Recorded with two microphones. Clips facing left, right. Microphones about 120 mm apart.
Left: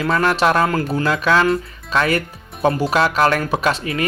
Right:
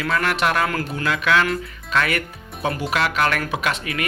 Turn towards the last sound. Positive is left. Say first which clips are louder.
# left 5 dB
turn(degrees=35)  # may be behind; listen again after turning